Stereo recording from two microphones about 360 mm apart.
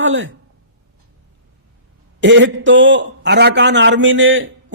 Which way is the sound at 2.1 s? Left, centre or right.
Right.